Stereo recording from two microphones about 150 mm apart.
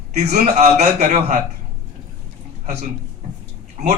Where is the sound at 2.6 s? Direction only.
55° right (ahead or behind).